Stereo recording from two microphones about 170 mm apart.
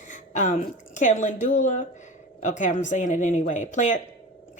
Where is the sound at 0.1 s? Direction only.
45° left (ahead or behind).